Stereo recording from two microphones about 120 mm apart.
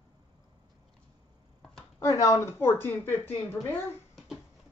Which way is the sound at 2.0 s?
30° left (ahead or behind).